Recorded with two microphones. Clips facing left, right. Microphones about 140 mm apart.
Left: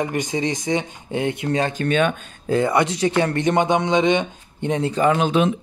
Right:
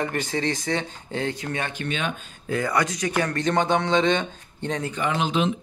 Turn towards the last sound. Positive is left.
turn(degrees=50)  # may be behind; listen again after turning